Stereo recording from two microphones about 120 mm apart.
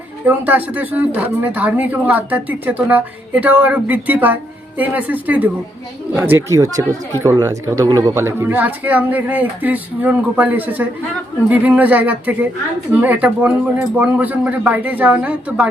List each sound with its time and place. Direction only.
0.3 s speech: 15° right (ahead or behind); by 8.1 s 30° right (ahead or behind)
8.1 s speech: 20° right (ahead or behind)